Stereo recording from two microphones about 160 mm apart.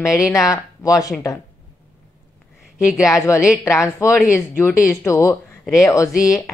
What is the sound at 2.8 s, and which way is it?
Speech, 5° right (ahead or behind).